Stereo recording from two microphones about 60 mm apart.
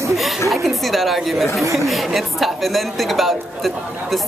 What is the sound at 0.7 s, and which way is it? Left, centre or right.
Speech, centre.